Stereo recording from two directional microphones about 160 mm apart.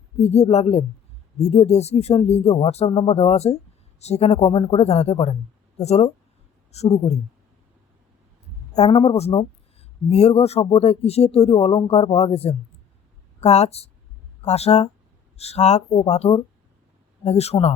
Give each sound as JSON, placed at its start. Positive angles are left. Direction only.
{"t": 0.2, "sound": "speech", "side_deg": 40}
{"t": 9.0, "sound": "speech", "side_deg": 40}